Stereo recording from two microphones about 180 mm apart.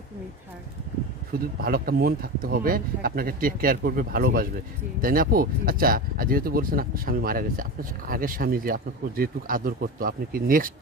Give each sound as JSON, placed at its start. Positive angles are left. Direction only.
{"t": 1.3, "sound": "speech", "side_deg": -55}